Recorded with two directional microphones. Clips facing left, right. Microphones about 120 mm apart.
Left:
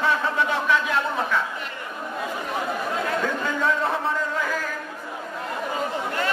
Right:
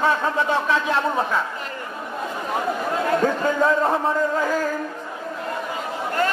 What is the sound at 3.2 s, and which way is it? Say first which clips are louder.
Chatter: right 6 dB; 40° right (ahead or behind).